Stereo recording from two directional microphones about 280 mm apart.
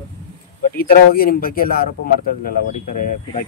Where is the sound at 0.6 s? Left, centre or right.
Left.